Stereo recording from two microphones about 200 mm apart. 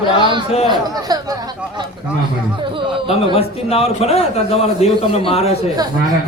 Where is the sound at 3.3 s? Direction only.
30° left (ahead or behind).